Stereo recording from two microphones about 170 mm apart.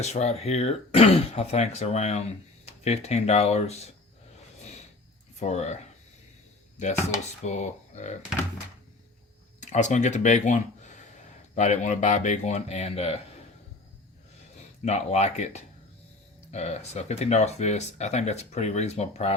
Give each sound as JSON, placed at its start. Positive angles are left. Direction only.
{"t": 0.0, "sound": "speech", "side_deg": 40}
{"t": 5.4, "sound": "speech", "side_deg": 40}
{"t": 7.4, "sound": "speech", "side_deg": 45}
{"t": 9.6, "sound": "speech", "side_deg": 45}
{"t": 14.8, "sound": "speech", "side_deg": 40}